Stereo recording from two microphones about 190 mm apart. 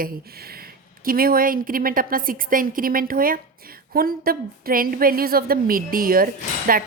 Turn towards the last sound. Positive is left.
turn(degrees=-50)  # may be behind; listen again after turning